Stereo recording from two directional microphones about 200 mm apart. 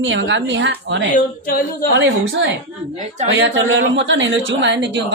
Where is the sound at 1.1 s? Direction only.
45° left (ahead or behind).